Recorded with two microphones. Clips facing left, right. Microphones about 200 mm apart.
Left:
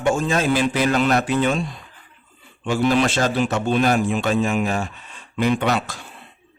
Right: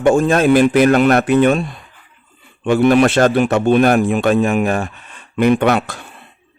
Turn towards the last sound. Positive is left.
turn(degrees=-60)  # may be behind; listen again after turning